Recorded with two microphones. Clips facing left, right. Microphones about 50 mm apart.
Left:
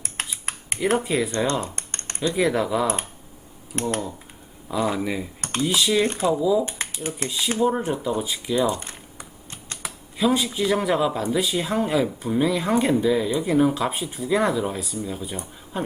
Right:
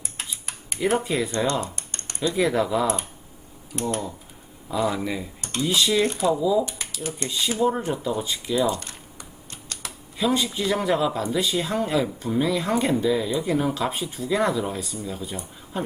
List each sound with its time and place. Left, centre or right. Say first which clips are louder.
0.0 s typing: left 4 dB; left
0.9 s speech: left 2 dB; centre
1.6 s typing: left 2 dB; left
2.3 s speech: even; centre
3.7 s speech: left 1 dB; left
4.7 s speech: left 1 dB; centre
5.4 s computer keyboard: left 2 dB; left
5.6 s speech: even; centre
6.1 s speech: even; left
6.4 s speech: left 2 dB; centre
6.7 s speech: left 2 dB; left
7.3 s speech: left 1 dB; centre
8.7 s typing: left 1 dB; left
10.2 s speech: left 2 dB; centre